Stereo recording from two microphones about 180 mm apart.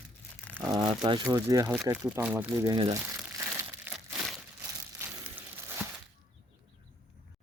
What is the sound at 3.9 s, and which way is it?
Crumpling, 10° right (ahead or behind).